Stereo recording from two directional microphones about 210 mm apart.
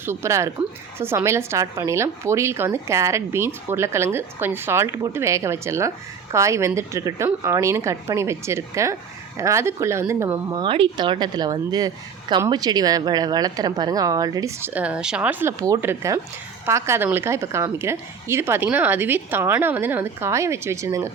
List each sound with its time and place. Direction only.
0.0 s a woman's voice: 10° right (ahead or behind)